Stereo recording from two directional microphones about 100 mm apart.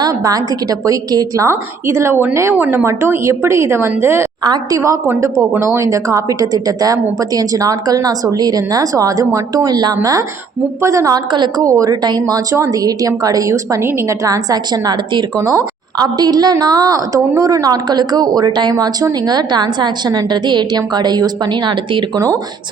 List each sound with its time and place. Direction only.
0.0 s a woman's voice: 35° right (ahead or behind)
4.4 s a woman's voice: 40° right (ahead or behind)
11.3 s a woman's voice: 50° right (ahead or behind)
11.6 s a woman's voice: 35° right (ahead or behind); by 22.0 s 50° right (ahead or behind)